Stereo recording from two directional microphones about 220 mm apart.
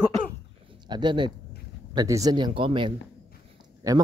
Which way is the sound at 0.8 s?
20° right (ahead or behind).